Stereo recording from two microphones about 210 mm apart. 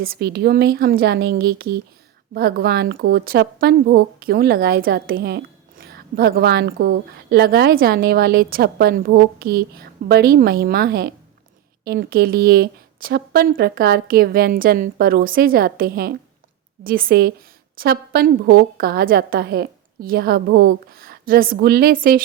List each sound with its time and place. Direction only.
0.0 s speech: 45° right (ahead or behind)